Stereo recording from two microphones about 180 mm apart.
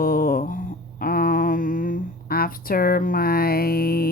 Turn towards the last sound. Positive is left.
turn(degrees=55)  # may be behind; listen again after turning